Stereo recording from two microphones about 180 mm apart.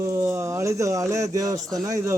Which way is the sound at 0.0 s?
15° right (ahead or behind).